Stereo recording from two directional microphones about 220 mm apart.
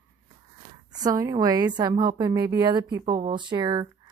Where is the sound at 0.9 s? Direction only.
15° right (ahead or behind).